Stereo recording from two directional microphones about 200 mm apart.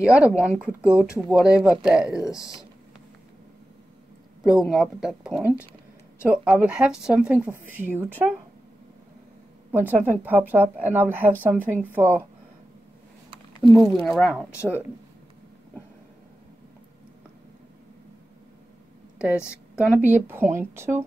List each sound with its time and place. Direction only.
0.0 s speech: 5° right (ahead or behind)
4.4 s speech: centre (ahead or behind)
9.7 s a woman's voice: 10° right (ahead or behind)
13.6 s speech: centre (ahead or behind)
19.4 s speech: 5° right (ahead or behind)